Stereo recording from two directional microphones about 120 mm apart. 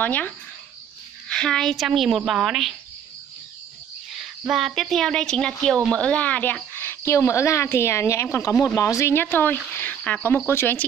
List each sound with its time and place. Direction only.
0.0 s speech: 15° left (ahead or behind)
1.3 s a woman's voice: 5° left (ahead or behind)
4.4 s a woman's voice: 5° right (ahead or behind); by 10.9 s 20° left (ahead or behind)